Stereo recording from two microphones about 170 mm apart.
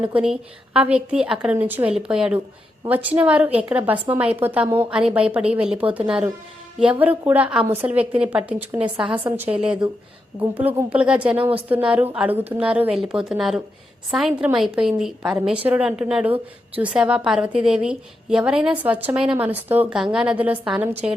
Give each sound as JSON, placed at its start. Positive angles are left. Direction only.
{"t": 0.0, "sound": "a woman's voice", "side_deg": -5}